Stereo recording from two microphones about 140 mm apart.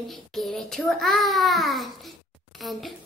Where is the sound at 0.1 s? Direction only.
Centre (ahead or behind).